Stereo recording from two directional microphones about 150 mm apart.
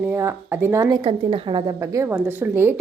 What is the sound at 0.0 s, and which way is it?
A woman's voice, 15° right (ahead or behind).